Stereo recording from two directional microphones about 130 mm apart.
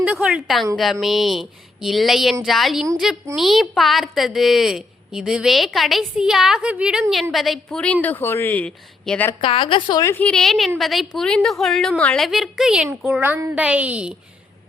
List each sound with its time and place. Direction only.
0.0 s a woman's voice: 10° right (ahead or behind); by 9.3 s 10° left (ahead or behind)
9.4 s a woman's voice: 40° left (ahead or behind)
10.0 s a woman's voice: 20° left (ahead or behind)
10.2 s a woman's voice: 5° left (ahead or behind)